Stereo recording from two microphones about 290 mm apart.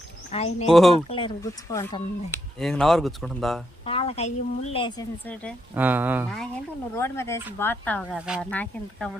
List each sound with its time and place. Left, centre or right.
0.3 s speech: left
0.7 s speech: centre
1.0 s speech: centre
3.8 s a woman's voice: centre
5.7 s speech: centre